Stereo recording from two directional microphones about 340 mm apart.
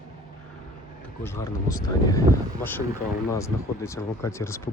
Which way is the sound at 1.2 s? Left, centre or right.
Centre.